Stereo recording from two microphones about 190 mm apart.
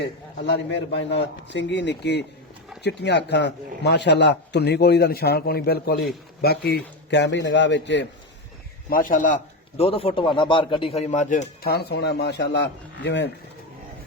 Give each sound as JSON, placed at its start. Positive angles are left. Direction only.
{"t": 0.4, "sound": "a man's voice", "side_deg": 65}
{"t": 8.9, "sound": "a man's voice", "side_deg": 45}
{"t": 11.6, "sound": "a man's voice", "side_deg": 55}